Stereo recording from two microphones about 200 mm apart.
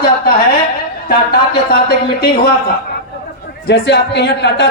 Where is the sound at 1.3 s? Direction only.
50° left (ahead or behind).